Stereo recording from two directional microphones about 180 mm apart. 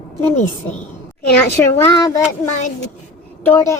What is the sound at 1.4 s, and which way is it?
A woman's voice, 15° left (ahead or behind).